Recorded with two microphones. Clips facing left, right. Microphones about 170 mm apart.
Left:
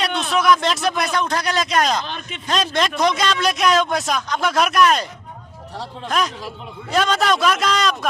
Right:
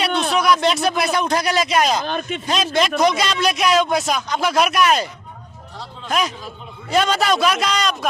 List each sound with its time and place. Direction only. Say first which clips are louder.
0.3 s a man's voice: left 1 dB; centre (ahead or behind)
2.0 s speech: right 8 dB; 45° right (ahead or behind)
2.5 s a man's voice: right 1 dB; 5° right (ahead or behind)
6.1 s a man's voice: right 1 dB; centre (ahead or behind)